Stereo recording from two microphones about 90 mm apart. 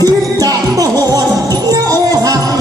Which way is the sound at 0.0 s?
40° right (ahead or behind).